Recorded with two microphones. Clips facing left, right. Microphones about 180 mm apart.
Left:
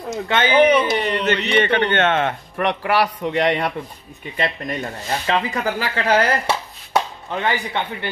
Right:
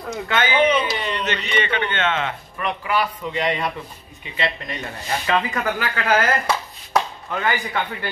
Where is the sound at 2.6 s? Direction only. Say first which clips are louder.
Left 4 dB; 70° left (ahead or behind).